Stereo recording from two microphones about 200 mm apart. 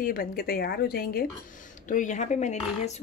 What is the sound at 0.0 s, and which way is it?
A woman's voice, 45° left (ahead or behind).